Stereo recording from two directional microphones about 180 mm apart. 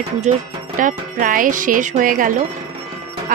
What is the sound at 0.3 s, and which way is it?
Speech, 40° right (ahead or behind).